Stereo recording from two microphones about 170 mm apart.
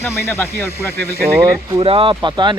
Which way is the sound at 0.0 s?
15° left (ahead or behind).